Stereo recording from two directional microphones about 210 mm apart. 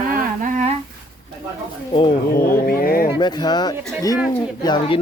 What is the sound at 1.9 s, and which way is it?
Speech, 25° left (ahead or behind).